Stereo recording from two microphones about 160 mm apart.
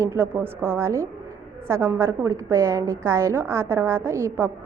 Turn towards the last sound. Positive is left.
turn(degrees=-15)  # may be behind; listen again after turning